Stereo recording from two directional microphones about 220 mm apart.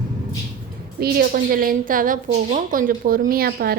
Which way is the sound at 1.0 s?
40° right (ahead or behind).